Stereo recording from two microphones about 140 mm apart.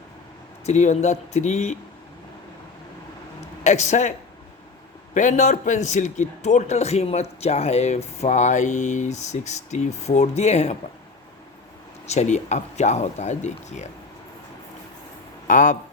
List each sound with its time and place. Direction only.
0.6 s a man's voice: 55° left (ahead or behind)
3.6 s a man's voice: 55° left (ahead or behind)
5.1 s a man's voice: 60° left (ahead or behind)
12.0 s a man's voice: 55° left (ahead or behind)
15.4 s a man's voice: 65° left (ahead or behind)